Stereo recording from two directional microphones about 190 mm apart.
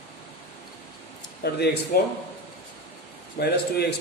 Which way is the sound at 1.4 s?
55° left (ahead or behind).